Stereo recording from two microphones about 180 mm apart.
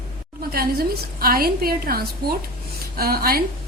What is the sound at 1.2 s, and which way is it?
A woman's voice, 55° right (ahead or behind).